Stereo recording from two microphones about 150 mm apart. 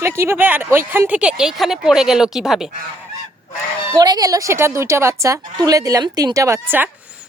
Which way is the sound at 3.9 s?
25° right (ahead or behind).